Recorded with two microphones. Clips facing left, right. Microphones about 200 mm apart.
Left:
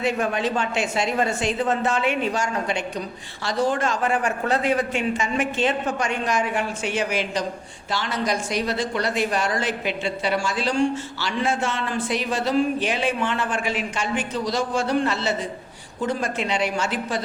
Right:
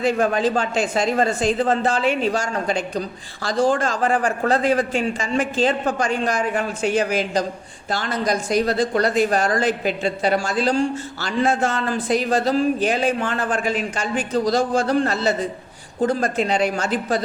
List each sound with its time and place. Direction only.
0.0 s speech: 35° right (ahead or behind)